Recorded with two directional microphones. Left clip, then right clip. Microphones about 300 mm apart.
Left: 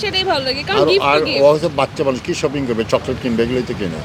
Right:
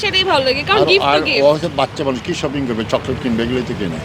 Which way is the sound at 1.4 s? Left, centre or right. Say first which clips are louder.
Left 1 dB; centre.